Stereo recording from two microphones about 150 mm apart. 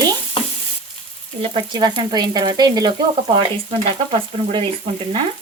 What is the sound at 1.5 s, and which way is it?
Sizzle, 30° right (ahead or behind).